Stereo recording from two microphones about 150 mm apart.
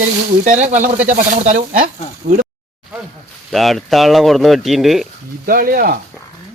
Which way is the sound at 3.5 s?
Centre (ahead or behind).